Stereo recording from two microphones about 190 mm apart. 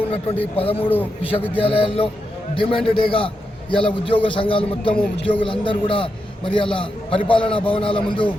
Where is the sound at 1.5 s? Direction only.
30° left (ahead or behind).